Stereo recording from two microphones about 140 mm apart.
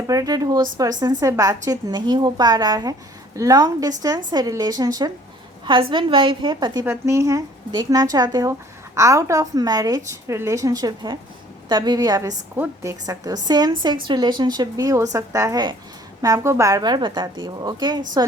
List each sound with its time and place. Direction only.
0.1 s a woman's voice: 25° right (ahead or behind)
7.0 s a woman's voice: 20° right (ahead or behind)